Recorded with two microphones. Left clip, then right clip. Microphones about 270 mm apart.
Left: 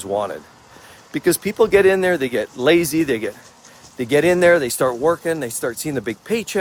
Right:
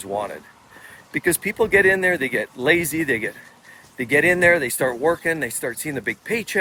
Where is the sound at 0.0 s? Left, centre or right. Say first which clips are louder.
Left 4 dB; left.